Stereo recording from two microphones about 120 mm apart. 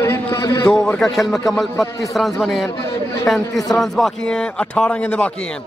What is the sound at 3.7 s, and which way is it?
A man's voice, centre (ahead or behind).